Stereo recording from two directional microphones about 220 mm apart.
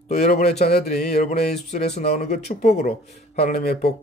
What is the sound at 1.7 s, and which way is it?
Speech, 30° left (ahead or behind).